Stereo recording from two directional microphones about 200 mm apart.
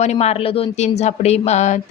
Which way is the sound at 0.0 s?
35° left (ahead or behind).